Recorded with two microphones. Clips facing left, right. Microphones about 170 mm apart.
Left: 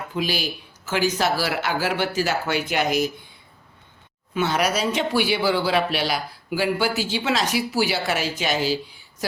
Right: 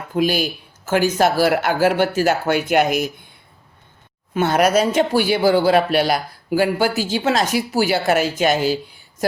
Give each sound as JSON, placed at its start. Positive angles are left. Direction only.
{"t": 0.1, "sound": "speech", "side_deg": -50}
{"t": 4.4, "sound": "speech", "side_deg": -50}